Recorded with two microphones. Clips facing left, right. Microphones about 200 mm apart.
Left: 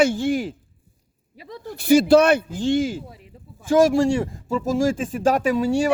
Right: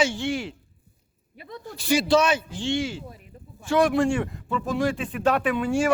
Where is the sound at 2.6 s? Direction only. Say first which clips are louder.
Left 6 dB; 45° left (ahead or behind).